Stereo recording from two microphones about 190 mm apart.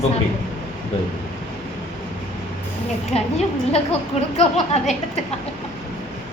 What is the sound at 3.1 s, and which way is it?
A woman's voice, 35° left (ahead or behind).